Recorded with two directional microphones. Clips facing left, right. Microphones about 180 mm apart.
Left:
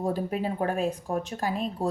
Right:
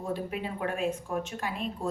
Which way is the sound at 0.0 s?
40° left (ahead or behind).